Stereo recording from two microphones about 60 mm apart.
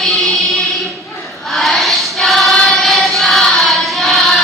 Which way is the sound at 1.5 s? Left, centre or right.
Centre.